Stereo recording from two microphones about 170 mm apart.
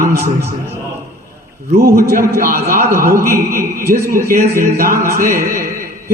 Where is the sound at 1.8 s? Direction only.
60° right (ahead or behind).